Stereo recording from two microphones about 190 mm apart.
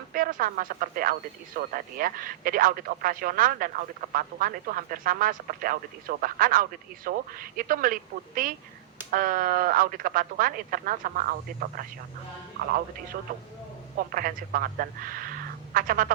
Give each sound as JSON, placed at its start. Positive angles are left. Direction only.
{"t": 0.1, "sound": "speech", "side_deg": -50}
{"t": 14.1, "sound": "speech", "side_deg": -50}